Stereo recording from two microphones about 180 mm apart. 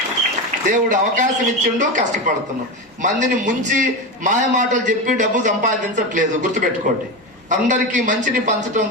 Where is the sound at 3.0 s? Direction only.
40° right (ahead or behind).